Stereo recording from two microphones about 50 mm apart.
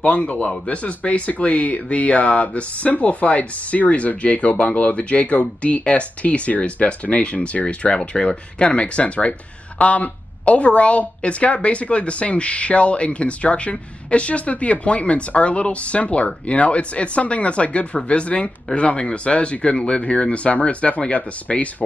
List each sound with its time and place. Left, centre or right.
0.0 s speech: left